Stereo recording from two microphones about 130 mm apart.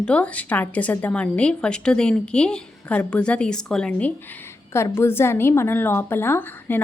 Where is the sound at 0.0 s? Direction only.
10° left (ahead or behind).